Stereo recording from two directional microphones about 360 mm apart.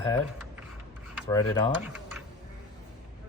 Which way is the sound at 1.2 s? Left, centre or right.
Centre.